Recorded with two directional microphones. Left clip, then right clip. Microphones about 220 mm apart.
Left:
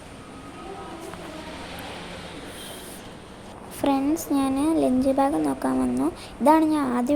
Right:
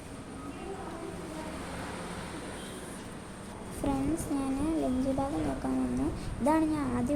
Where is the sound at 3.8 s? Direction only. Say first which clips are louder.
Left 9 dB; 30° left (ahead or behind).